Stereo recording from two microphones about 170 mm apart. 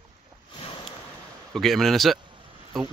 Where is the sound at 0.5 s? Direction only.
30° left (ahead or behind).